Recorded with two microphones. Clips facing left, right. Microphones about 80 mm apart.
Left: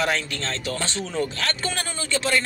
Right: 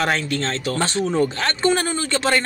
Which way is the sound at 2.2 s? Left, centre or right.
Right.